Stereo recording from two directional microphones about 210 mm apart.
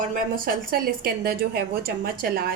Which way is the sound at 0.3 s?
45° right (ahead or behind).